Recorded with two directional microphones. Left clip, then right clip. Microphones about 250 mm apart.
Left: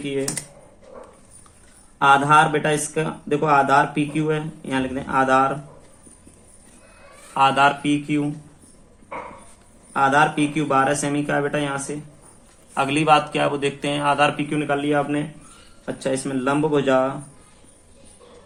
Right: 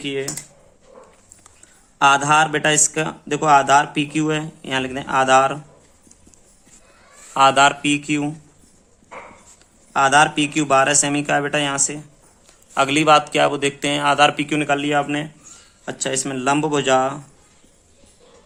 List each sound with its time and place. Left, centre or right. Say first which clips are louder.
0.0 s speech: right 1 dB; right
2.0 s speech: even; right
7.3 s speech: right 3 dB; right
9.9 s speech: right 3 dB; right